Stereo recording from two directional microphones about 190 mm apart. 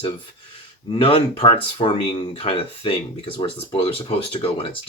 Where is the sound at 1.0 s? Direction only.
30° left (ahead or behind).